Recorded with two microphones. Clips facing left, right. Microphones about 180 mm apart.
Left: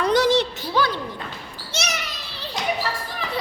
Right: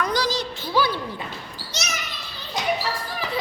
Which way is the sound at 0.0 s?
25° left (ahead or behind).